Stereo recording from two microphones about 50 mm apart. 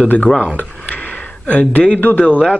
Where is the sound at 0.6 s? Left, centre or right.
Left.